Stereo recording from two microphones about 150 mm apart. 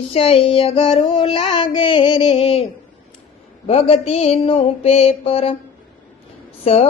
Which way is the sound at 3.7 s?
40° left (ahead or behind).